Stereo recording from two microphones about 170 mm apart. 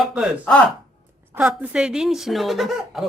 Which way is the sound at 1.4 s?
5° right (ahead or behind).